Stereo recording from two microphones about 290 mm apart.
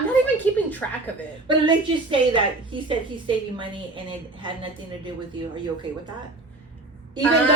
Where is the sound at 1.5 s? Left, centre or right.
Centre.